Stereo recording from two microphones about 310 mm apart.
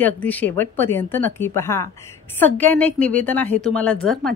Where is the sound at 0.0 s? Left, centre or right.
Centre.